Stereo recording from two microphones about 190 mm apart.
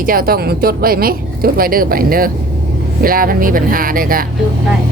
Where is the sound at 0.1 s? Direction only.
50° right (ahead or behind).